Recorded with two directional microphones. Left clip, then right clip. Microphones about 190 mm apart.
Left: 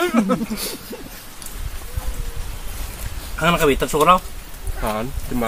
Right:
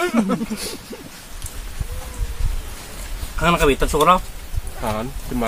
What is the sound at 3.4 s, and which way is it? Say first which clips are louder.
Speech: even; 5° right (ahead or behind).